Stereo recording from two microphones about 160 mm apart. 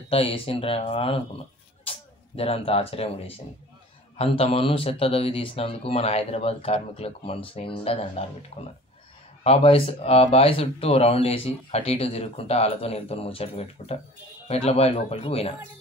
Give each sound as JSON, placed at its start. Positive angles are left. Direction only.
{"t": 0.1, "sound": "speech", "side_deg": 35}